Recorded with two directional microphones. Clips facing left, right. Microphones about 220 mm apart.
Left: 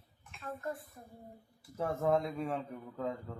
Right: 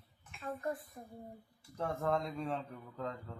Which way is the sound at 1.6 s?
5° left (ahead or behind).